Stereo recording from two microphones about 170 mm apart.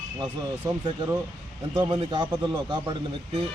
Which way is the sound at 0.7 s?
25° right (ahead or behind).